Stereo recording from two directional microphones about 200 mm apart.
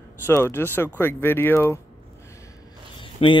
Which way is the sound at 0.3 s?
10° left (ahead or behind).